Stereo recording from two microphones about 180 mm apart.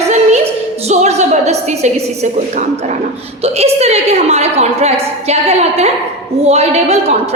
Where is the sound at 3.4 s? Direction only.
35° right (ahead or behind).